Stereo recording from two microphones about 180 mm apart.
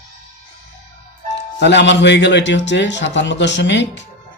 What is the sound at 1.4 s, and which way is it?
Speech, 75° left (ahead or behind).